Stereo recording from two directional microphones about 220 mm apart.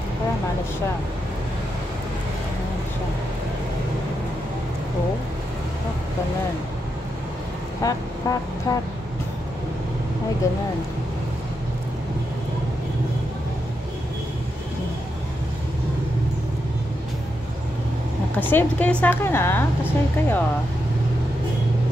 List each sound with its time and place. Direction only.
7.8 s a woman's voice: 15° left (ahead or behind)
18.3 s a woman's voice: 10° left (ahead or behind)